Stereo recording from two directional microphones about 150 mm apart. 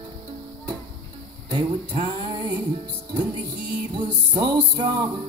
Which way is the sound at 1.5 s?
35° right (ahead or behind).